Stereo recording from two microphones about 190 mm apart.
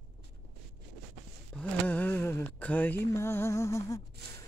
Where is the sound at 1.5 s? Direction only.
10° left (ahead or behind).